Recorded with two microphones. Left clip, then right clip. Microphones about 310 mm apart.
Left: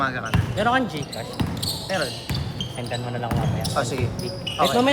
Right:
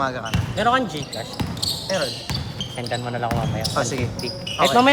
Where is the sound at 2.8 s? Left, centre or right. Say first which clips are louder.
Right 4 dB; right.